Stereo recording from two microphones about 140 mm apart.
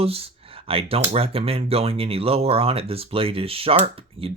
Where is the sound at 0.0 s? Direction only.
45° right (ahead or behind).